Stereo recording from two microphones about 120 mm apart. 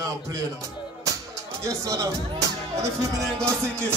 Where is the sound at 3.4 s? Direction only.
25° right (ahead or behind).